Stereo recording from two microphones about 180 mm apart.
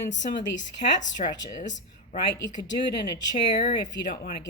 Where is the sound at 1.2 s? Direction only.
40° left (ahead or behind).